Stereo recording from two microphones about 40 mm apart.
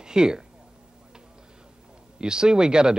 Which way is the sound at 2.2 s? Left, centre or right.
Right.